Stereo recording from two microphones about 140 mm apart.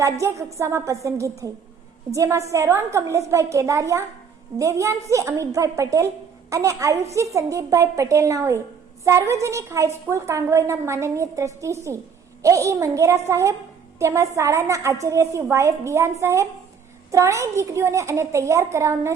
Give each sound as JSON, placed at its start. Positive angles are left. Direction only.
{"t": 0.0, "sound": "a woman's voice", "side_deg": -20}